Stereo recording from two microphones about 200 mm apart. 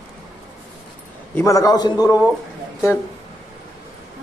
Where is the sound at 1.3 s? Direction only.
15° left (ahead or behind).